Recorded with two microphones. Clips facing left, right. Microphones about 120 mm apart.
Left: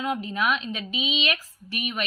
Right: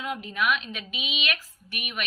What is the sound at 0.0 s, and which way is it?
A woman's voice, 35° left (ahead or behind).